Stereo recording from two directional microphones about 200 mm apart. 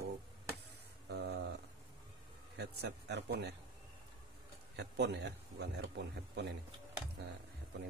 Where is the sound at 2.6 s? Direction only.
60° right (ahead or behind).